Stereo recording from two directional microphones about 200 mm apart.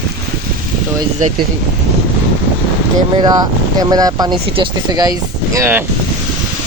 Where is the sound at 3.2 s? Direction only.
20° right (ahead or behind).